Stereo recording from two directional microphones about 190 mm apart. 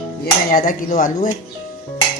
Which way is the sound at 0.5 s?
45° left (ahead or behind).